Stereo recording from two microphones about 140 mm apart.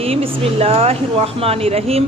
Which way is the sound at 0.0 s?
45° right (ahead or behind).